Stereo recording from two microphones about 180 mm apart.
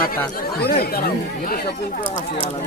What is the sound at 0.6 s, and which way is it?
Speech, 60° left (ahead or behind).